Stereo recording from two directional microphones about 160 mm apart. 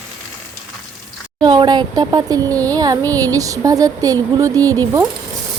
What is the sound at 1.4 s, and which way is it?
A woman's voice, 25° right (ahead or behind).